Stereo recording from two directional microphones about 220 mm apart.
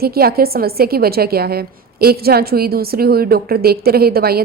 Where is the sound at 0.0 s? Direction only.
45° right (ahead or behind).